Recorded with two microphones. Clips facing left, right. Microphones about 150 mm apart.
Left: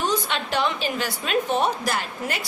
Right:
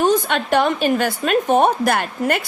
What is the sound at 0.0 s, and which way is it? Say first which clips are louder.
A woman's voice: right 8 dB; 50° right (ahead or behind).